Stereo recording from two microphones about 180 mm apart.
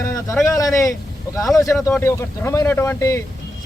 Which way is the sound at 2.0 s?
15° left (ahead or behind).